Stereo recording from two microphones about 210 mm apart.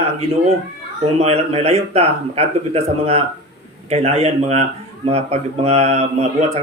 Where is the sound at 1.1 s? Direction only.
30° right (ahead or behind).